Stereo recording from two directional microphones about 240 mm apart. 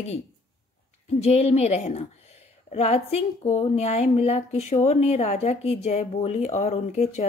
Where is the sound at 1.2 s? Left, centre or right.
Left.